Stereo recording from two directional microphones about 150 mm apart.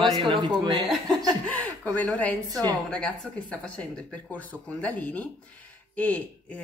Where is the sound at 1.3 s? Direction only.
5° left (ahead or behind).